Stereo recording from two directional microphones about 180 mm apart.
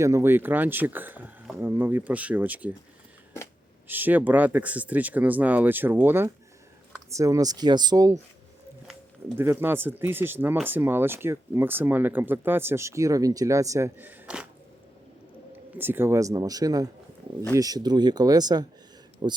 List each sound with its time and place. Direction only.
0.0 s speech: 15° right (ahead or behind)
3.8 s a man's voice: 10° right (ahead or behind)
9.4 s speech: 15° right (ahead or behind)
15.5 s a man's voice: 10° right (ahead or behind); by 19.4 s 30° right (ahead or behind)